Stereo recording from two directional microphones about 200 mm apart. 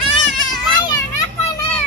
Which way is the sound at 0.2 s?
Centre (ahead or behind).